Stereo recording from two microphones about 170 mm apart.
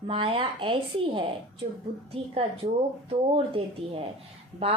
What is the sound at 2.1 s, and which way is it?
A woman's voice, 35° right (ahead or behind).